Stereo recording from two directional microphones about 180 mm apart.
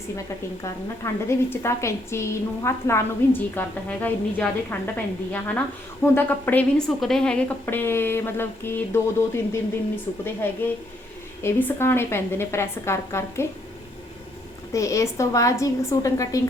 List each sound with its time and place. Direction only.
1.3 s a woman's voice: 15° left (ahead or behind)
14.7 s a woman's voice: 15° left (ahead or behind)